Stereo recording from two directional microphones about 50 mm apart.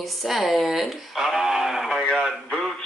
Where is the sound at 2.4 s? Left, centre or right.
Centre.